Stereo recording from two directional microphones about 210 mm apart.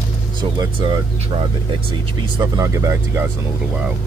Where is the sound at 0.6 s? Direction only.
20° right (ahead or behind).